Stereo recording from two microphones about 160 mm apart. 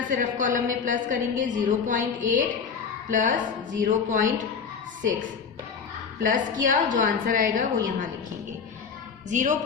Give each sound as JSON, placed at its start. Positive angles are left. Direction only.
{"t": 0.1, "sound": "a woman's voice", "side_deg": -55}
{"t": 6.2, "sound": "a woman's voice", "side_deg": -55}
{"t": 9.3, "sound": "a woman's voice", "side_deg": -50}